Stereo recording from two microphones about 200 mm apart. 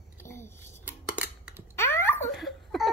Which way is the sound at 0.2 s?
10° left (ahead or behind).